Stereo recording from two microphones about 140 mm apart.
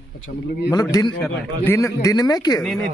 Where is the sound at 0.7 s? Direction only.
25° left (ahead or behind).